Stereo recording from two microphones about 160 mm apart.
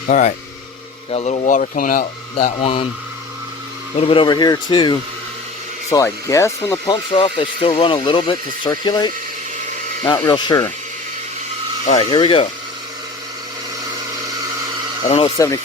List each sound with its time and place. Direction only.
0.1 s speech: 50° left (ahead or behind)
2.3 s speech: 35° left (ahead or behind)
3.9 s speech: 35° left (ahead or behind); by 6.9 s 20° left (ahead or behind)
6.9 s speech: 30° left (ahead or behind)
10.2 s speech: 25° left (ahead or behind)
11.9 s speech: 35° left (ahead or behind)
15.0 s speech: 40° left (ahead or behind)
15.4 s speech: 20° left (ahead or behind)